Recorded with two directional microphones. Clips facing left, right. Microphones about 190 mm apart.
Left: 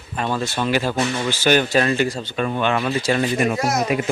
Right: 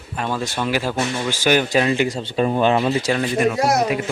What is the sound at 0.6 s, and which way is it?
Speech, 5° right (ahead or behind).